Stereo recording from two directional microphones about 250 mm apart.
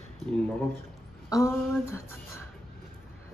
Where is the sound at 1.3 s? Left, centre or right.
Centre.